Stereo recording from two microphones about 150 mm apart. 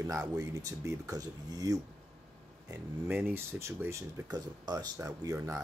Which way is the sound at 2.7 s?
15° right (ahead or behind).